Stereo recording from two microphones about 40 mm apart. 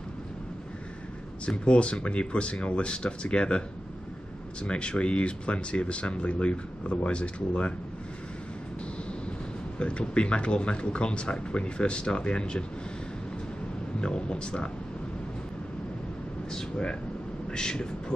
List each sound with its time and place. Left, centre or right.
1.6 s speech: left
4.6 s speech: left
9.8 s speech: left
14.0 s speech: left
16.5 s speech: left